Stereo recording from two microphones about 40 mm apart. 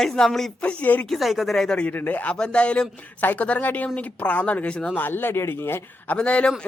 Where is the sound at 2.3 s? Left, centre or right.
Left.